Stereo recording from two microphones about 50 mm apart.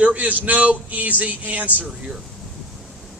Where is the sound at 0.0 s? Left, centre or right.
Right.